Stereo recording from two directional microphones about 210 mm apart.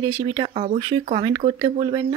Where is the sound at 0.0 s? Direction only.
20° right (ahead or behind).